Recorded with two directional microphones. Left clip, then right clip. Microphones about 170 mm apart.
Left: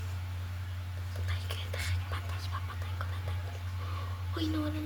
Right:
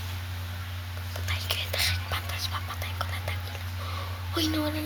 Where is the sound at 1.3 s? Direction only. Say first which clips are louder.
Right 11 dB; 25° left (ahead or behind).